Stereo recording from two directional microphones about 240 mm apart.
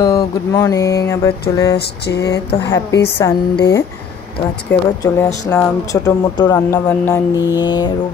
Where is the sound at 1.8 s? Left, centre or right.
Left.